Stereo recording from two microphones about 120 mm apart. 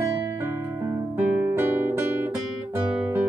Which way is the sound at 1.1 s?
15° right (ahead or behind).